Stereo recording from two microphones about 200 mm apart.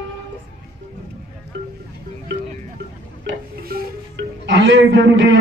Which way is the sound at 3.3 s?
55° right (ahead or behind).